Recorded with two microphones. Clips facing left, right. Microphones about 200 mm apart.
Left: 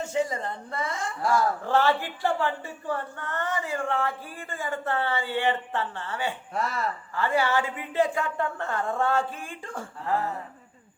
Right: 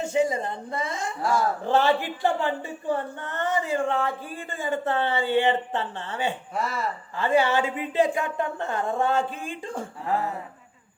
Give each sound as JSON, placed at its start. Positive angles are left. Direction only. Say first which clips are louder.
{"t": 0.0, "sound": "a woman's voice", "louder": "right 4 dB", "side_deg": -15}
{"t": 1.2, "sound": "speech", "louder": "even", "side_deg": 0}
{"t": 1.6, "sound": "a woman's voice", "louder": "right 2 dB", "side_deg": -20}
{"t": 6.5, "sound": "speech", "louder": "right 1 dB", "side_deg": 0}
{"t": 7.2, "sound": "a woman's voice", "louder": "right 3 dB", "side_deg": -20}